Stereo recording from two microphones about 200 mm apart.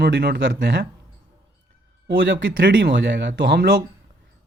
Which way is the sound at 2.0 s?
60° right (ahead or behind).